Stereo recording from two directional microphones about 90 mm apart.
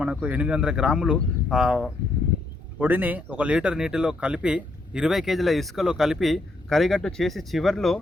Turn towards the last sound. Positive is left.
turn(degrees=5)  # may be behind; listen again after turning